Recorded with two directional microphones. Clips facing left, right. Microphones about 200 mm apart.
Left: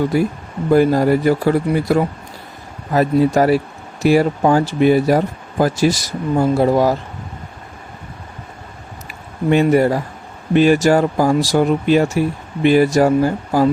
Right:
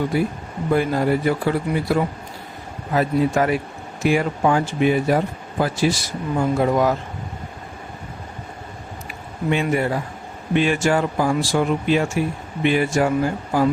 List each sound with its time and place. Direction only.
0.1 s speech: 45° left (ahead or behind)
9.5 s speech: 40° left (ahead or behind)